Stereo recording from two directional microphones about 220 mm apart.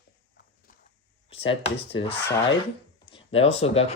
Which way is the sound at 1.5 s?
25° left (ahead or behind).